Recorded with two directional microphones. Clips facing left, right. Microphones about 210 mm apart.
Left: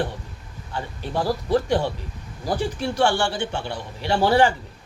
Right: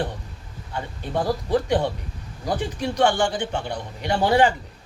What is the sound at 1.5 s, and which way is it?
A man's voice, 20° right (ahead or behind).